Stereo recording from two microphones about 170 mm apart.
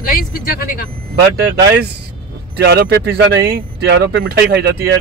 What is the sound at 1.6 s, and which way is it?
Speech, 75° right (ahead or behind).